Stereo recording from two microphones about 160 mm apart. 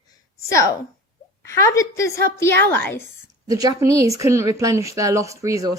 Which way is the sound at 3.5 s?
20° right (ahead or behind).